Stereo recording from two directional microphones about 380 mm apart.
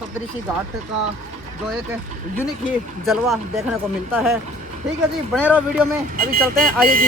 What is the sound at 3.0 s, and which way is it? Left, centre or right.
Speech, centre.